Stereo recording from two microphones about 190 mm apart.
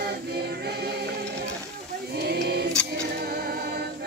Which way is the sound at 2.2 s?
55° right (ahead or behind).